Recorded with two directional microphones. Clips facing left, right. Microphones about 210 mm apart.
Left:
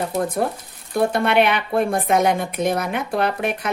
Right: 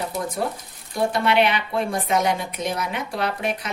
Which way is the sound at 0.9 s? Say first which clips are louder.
Left 3 dB; 55° left (ahead or behind).